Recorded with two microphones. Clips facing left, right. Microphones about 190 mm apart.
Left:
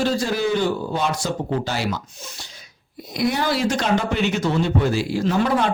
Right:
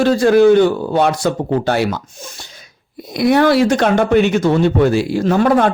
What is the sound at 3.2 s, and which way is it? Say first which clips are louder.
Speech: right 9 dB; 65° right (ahead or behind).